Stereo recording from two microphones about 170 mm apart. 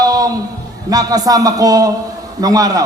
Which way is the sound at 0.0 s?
20° right (ahead or behind).